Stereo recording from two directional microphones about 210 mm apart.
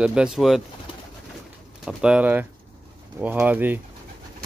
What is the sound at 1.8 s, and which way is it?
Speech, 5° right (ahead or behind).